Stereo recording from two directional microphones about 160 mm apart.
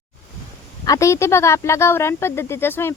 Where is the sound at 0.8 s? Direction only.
20° left (ahead or behind).